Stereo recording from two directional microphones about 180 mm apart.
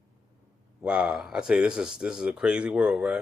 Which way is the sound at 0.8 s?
5° right (ahead or behind).